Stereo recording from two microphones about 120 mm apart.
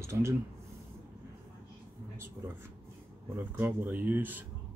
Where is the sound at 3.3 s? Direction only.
15° right (ahead or behind).